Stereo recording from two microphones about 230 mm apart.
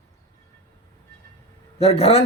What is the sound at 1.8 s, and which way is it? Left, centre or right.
Speech, left.